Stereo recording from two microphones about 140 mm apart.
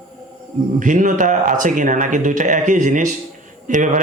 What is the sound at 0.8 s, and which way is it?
A man's voice, 65° right (ahead or behind).